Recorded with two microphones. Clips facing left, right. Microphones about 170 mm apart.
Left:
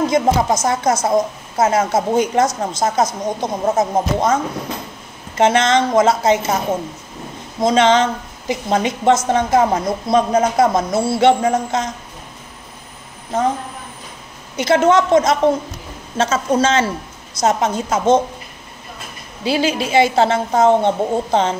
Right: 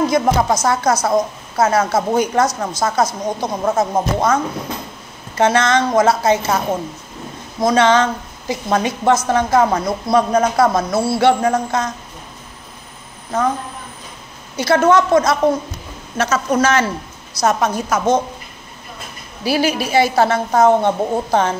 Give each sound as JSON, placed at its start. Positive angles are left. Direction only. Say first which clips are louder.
{"t": 0.0, "sound": "a woman's voice", "louder": "even", "side_deg": 20}
{"t": 5.4, "sound": "a woman's voice", "louder": "left 1 dB", "side_deg": 20}
{"t": 7.6, "sound": "a woman's voice", "louder": "even", "side_deg": 20}
{"t": 14.6, "sound": "a woman's voice", "louder": "even", "side_deg": 20}
{"t": 19.4, "sound": "a woman's voice", "louder": "even", "side_deg": 20}